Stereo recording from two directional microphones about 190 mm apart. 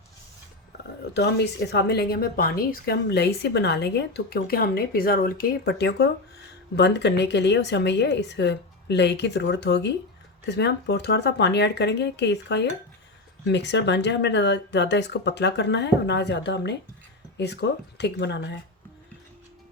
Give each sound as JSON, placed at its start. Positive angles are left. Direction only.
{"t": 1.1, "sound": "a woman's voice", "side_deg": 65}